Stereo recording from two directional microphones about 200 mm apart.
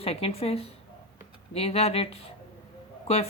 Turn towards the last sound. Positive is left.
turn(degrees=30)  # may be behind; listen again after turning